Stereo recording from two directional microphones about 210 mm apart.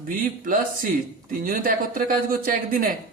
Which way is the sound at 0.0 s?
40° right (ahead or behind).